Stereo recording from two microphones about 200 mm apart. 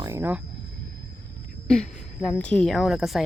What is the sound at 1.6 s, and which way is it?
A woman's voice, 5° left (ahead or behind).